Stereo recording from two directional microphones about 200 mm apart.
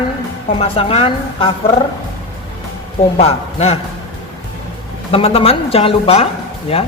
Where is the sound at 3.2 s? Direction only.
30° left (ahead or behind).